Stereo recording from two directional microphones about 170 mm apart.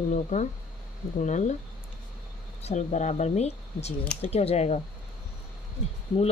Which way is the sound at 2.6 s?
40° left (ahead or behind).